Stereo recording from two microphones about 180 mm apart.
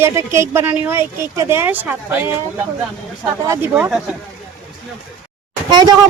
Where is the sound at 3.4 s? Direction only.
15° right (ahead or behind).